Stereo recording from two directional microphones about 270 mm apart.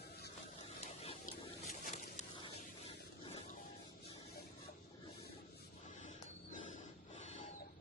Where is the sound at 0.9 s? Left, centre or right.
Left.